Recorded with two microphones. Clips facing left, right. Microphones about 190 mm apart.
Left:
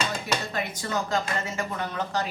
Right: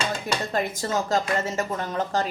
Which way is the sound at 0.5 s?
45° right (ahead or behind).